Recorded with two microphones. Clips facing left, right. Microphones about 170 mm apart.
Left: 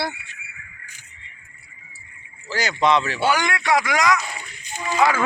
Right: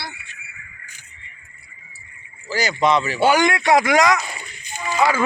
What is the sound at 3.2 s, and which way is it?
Speech, 15° right (ahead or behind).